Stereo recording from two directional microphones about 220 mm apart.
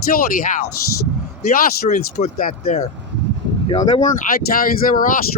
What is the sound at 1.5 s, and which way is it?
Speech, 35° left (ahead or behind).